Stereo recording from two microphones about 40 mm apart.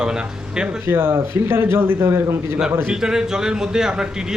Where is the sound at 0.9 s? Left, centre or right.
Right.